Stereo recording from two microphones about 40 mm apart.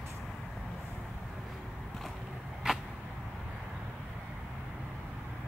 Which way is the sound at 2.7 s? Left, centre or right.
Centre.